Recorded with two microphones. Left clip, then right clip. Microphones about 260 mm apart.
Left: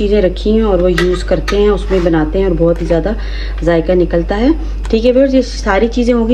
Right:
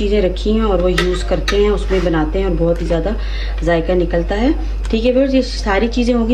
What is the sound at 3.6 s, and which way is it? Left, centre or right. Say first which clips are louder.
Speech: left 4 dB; centre.